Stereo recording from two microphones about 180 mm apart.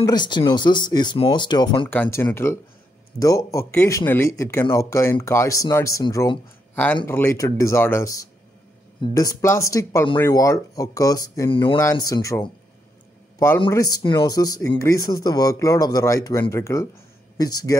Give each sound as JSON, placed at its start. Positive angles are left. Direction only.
{"t": 0.0, "sound": "speech", "side_deg": 25}
{"t": 1.9, "sound": "speech", "side_deg": 10}
{"t": 6.7, "sound": "a sound", "side_deg": 10}
{"t": 7.1, "sound": "speech", "side_deg": 10}
{"t": 11.5, "sound": "speech", "side_deg": 30}
{"t": 11.8, "sound": "speech", "side_deg": 15}
{"t": 13.7, "sound": "speech", "side_deg": 20}